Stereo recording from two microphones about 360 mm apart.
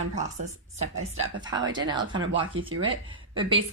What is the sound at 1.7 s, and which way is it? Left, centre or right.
Speech, centre.